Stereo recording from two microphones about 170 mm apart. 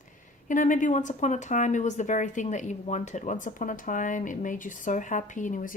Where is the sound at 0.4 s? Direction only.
50° left (ahead or behind).